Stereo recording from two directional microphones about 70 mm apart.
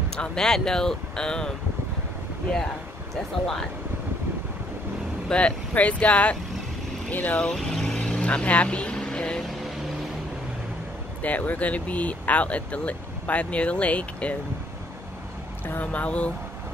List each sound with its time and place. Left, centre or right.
0.1 s speech: centre
5.3 s speech: centre
7.4 s vehicle: centre
11.2 s speech: left
15.8 s speech: centre